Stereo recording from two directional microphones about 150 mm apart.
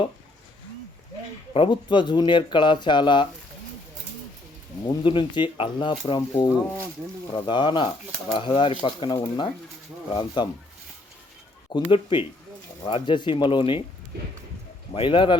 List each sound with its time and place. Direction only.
1.5 s speech: 35° left (ahead or behind)
4.9 s speech: 30° left (ahead or behind)
11.7 s speech: 35° left (ahead or behind)
14.9 s speech: 35° left (ahead or behind)